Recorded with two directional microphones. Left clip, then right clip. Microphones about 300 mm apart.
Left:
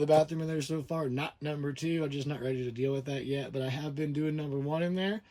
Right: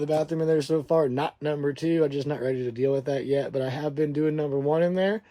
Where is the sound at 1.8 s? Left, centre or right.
Centre.